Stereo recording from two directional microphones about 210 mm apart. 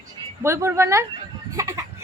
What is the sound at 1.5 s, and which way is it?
Chicken, 15° right (ahead or behind).